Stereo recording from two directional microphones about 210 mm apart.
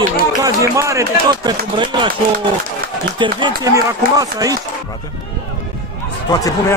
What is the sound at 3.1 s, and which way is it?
A man's voice, 20° right (ahead or behind).